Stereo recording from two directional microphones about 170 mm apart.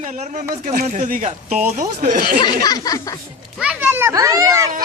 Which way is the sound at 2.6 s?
20° left (ahead or behind).